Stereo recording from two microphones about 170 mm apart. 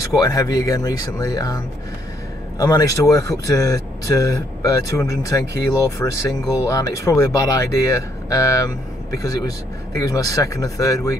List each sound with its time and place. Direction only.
0.0 s speech: 20° left (ahead or behind)
2.6 s speech: 20° left (ahead or behind)
9.9 s speech: 20° left (ahead or behind)